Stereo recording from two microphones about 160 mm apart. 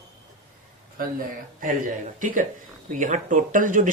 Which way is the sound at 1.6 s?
55° right (ahead or behind).